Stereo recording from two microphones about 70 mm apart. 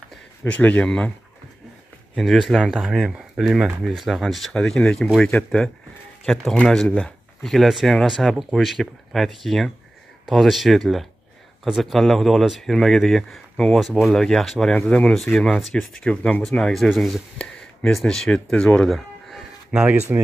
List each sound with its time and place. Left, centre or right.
0.5 s speech: left
2.1 s speech: centre
14.9 s speech: centre
16.4 s speech: centre
17.4 s a sound: centre
17.9 s speech: centre
18.9 s chicken: centre
19.7 s speech: right